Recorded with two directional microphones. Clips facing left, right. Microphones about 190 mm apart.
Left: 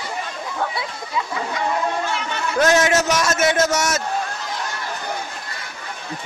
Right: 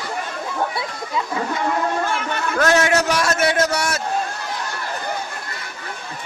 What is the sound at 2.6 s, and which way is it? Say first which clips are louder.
Speech: left 1 dB; 20° left (ahead or behind).